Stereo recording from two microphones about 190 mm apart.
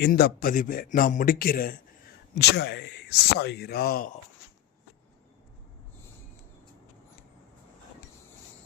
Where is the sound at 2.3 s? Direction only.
65° left (ahead or behind).